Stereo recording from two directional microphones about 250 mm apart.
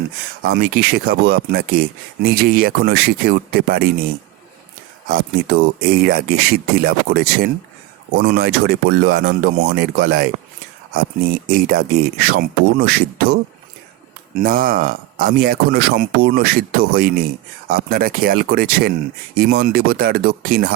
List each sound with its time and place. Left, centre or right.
0.4 s speech: right
5.0 s speech: right
14.4 s speech: right